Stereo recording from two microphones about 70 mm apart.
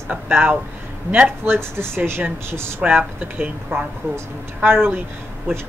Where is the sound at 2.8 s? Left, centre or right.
Centre.